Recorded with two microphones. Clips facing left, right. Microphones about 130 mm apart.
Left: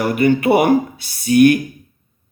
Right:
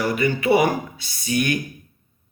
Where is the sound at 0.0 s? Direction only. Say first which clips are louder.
Left 6 dB; 55° left (ahead or behind).